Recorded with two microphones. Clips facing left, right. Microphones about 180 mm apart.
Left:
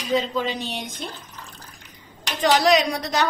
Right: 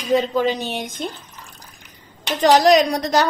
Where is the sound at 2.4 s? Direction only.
40° right (ahead or behind).